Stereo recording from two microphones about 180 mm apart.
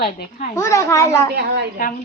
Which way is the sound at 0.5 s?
15° left (ahead or behind).